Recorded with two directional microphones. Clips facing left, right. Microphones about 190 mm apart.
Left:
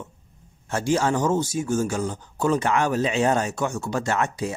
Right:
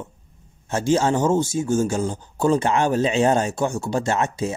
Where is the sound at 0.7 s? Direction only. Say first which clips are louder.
Right 3 dB; 20° right (ahead or behind).